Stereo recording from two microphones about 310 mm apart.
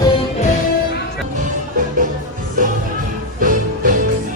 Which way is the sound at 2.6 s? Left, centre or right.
Right.